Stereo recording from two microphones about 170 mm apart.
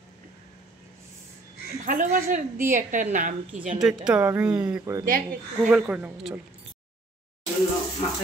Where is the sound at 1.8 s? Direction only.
50° right (ahead or behind).